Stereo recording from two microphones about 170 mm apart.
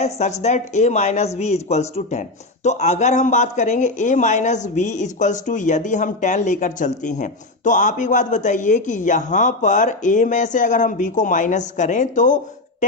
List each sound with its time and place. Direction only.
0.0 s a woman's voice: 40° left (ahead or behind)